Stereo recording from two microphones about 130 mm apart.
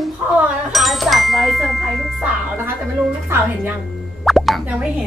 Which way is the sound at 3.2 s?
20° right (ahead or behind).